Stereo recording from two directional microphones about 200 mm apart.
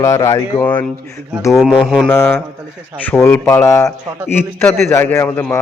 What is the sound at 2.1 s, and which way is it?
Speech, 10° left (ahead or behind).